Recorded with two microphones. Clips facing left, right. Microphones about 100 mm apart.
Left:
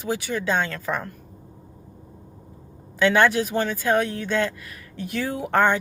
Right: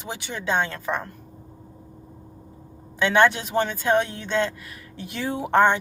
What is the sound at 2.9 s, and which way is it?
Speech, 25° right (ahead or behind).